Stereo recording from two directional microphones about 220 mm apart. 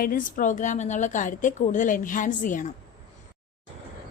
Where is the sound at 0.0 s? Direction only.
40° left (ahead or behind).